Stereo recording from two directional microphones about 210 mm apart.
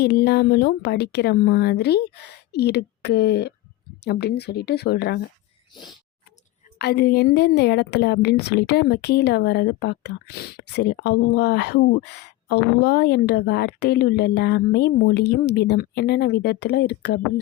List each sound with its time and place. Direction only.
0.0 s a woman's voice: 50° left (ahead or behind)
6.7 s a woman's voice: 50° left (ahead or behind)